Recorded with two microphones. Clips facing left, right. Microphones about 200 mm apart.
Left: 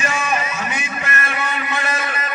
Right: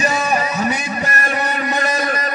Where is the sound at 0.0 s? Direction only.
40° right (ahead or behind).